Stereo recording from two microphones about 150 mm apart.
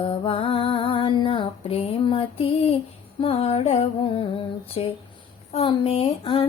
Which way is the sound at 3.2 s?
40° left (ahead or behind).